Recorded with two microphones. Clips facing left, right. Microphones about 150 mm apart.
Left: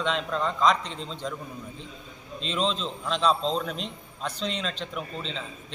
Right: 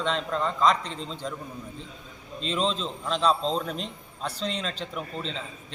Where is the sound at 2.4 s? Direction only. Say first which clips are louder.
Right 1 dB; 5° right (ahead or behind).